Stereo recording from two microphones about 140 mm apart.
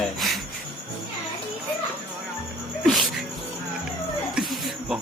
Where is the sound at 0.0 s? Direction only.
Centre (ahead or behind).